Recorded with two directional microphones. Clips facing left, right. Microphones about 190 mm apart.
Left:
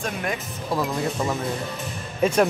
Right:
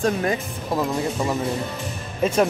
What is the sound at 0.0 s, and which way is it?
Speech, 30° right (ahead or behind).